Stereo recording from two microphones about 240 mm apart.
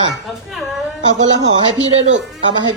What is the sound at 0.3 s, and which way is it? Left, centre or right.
Speech, centre.